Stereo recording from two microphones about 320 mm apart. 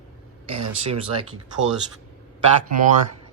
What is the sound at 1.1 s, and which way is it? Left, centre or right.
Speech, right.